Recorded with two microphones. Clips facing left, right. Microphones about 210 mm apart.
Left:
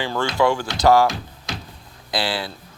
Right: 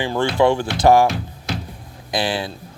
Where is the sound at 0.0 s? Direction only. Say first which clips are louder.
Right 3 dB; 20° right (ahead or behind).